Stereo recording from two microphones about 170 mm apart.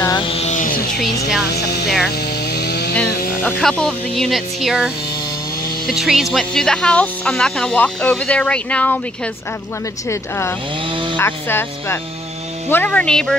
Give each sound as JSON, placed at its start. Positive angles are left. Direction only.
{"t": 0.0, "sound": "music", "side_deg": 25}
{"t": 1.5, "sound": "speech", "side_deg": 75}
{"t": 2.0, "sound": "chainsaw", "side_deg": 75}
{"t": 3.1, "sound": "music", "side_deg": 60}
{"t": 3.4, "sound": "speech", "side_deg": 10}
{"t": 10.9, "sound": "chainsaw", "side_deg": -30}
{"t": 11.1, "sound": "speech", "side_deg": 15}